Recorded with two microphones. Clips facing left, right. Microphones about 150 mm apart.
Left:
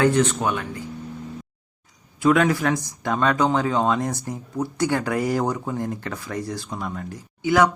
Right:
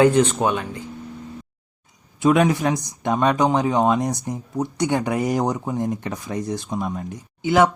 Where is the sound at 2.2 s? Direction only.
20° right (ahead or behind).